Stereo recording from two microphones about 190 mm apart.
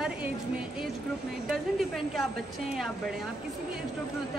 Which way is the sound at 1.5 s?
Centre (ahead or behind).